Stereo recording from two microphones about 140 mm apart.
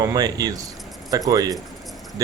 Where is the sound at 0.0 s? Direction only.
25° right (ahead or behind).